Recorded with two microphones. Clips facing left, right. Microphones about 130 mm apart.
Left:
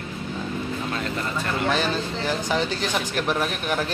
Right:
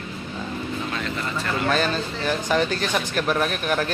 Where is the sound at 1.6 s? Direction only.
15° left (ahead or behind).